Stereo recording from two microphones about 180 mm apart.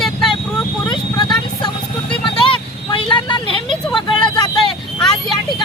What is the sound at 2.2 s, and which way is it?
Vehicle, 25° left (ahead or behind).